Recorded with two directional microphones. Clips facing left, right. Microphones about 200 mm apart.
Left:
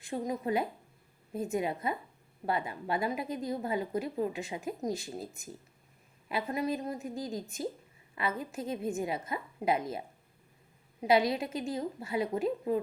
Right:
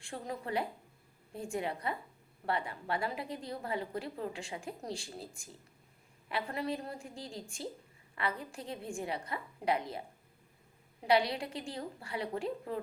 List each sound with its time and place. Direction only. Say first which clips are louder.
0.0 s a woman's voice: left 7 dB; 20° left (ahead or behind)
11.0 s a woman's voice: left 3 dB; 20° left (ahead or behind)